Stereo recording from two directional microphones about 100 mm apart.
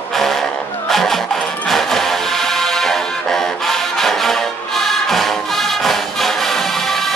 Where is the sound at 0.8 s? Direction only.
5° left (ahead or behind).